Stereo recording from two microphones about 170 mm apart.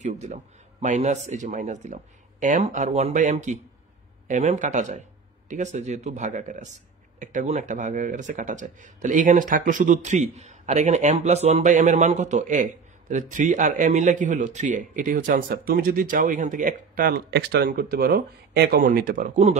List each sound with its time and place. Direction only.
0.0 s speech: 45° right (ahead or behind)